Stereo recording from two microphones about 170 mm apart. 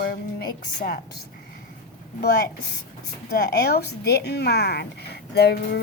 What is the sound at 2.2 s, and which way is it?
Speech, 75° left (ahead or behind).